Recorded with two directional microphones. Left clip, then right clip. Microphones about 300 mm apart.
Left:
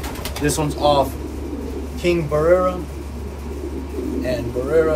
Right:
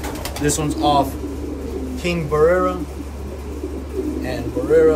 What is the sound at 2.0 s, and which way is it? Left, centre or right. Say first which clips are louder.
Speech: right 1 dB; centre.